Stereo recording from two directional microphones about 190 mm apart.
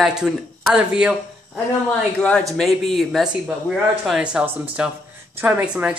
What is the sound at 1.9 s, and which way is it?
Speech, 5° left (ahead or behind).